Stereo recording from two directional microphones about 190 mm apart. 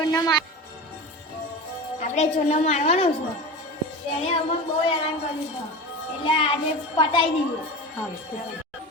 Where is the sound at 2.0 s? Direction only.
40° left (ahead or behind).